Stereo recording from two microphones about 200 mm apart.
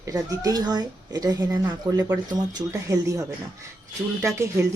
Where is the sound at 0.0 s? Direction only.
15° right (ahead or behind).